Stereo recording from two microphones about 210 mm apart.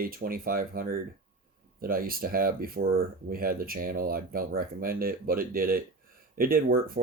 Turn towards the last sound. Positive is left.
turn(degrees=-45)  # may be behind; listen again after turning